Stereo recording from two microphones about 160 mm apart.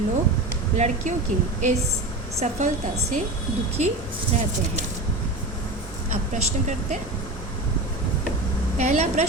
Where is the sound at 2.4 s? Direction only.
50° right (ahead or behind).